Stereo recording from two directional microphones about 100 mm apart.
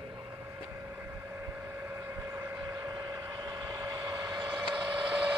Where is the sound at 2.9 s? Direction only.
40° right (ahead or behind).